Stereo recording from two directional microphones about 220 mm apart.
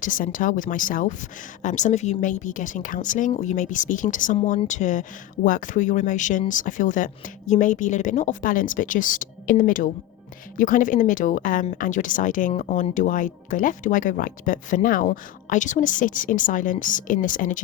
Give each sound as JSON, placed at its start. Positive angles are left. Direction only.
{"t": 0.0, "sound": "a woman's voice", "side_deg": 35}